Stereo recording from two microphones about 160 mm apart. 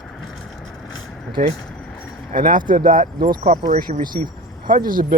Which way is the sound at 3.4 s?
45° right (ahead or behind).